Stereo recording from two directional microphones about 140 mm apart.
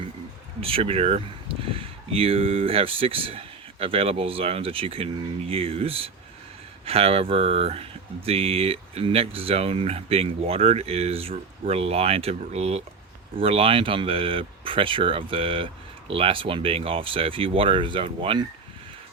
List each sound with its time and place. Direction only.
0.6 s speech: 45° right (ahead or behind)